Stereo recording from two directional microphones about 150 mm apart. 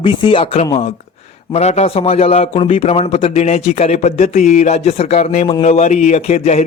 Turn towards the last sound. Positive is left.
turn(degrees=45)  # may be behind; listen again after turning